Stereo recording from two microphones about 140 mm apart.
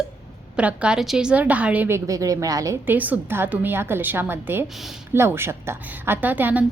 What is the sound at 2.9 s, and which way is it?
A woman's voice, 10° right (ahead or behind).